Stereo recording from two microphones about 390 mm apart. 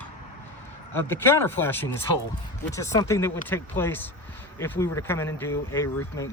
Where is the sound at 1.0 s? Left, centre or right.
Centre.